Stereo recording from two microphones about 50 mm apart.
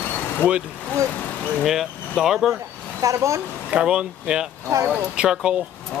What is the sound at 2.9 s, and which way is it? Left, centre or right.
Speech, right.